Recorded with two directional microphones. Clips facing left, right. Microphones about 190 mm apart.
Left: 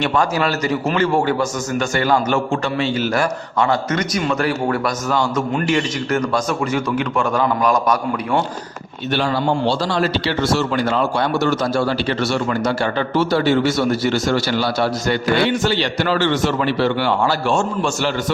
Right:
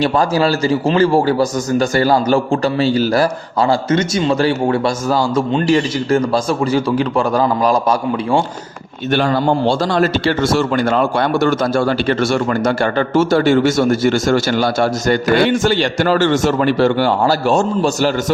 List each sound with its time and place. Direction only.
0.0 s a man's voice: 30° right (ahead or behind)
9.1 s a man's voice: 50° right (ahead or behind)